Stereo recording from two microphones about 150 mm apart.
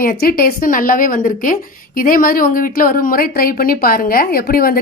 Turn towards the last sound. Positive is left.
turn(degrees=80)